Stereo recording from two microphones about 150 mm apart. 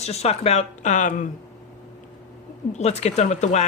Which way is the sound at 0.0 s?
45° left (ahead or behind).